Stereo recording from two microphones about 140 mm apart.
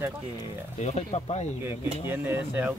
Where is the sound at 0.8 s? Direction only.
55° left (ahead or behind).